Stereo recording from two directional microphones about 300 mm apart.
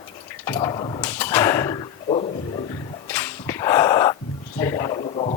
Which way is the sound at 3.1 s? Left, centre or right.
Centre.